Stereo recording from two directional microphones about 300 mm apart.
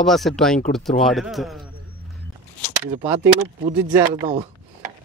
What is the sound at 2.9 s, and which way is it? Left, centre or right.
Speech, centre.